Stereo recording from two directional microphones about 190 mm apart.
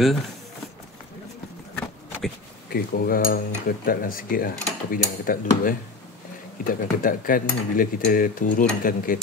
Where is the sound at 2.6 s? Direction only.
55° left (ahead or behind).